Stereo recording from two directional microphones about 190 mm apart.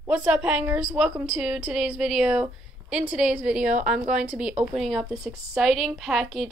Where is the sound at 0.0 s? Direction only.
5° right (ahead or behind).